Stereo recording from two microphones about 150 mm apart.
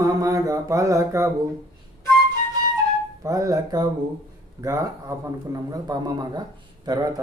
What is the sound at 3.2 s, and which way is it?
Speech, 20° right (ahead or behind).